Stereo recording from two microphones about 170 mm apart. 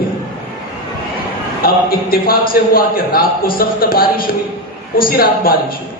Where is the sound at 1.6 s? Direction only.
60° left (ahead or behind).